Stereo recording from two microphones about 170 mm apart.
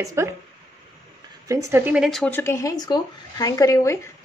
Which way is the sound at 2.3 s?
15° left (ahead or behind).